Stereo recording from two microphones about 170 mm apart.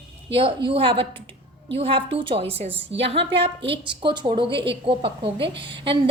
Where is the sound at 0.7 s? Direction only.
30° right (ahead or behind).